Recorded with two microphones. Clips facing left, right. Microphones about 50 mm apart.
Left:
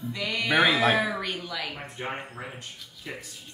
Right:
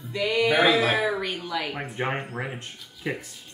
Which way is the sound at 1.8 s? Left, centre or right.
Right.